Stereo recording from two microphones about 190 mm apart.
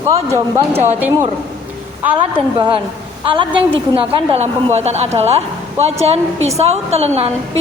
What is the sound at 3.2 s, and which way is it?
A woman's voice, 25° right (ahead or behind).